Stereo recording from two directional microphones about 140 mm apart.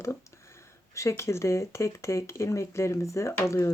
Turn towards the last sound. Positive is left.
turn(degrees=20)  # may be behind; listen again after turning